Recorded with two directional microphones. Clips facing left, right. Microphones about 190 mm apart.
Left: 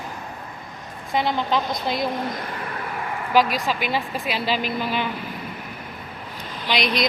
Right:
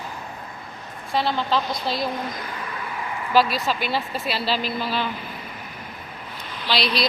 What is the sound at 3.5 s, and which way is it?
Speech, 15° left (ahead or behind).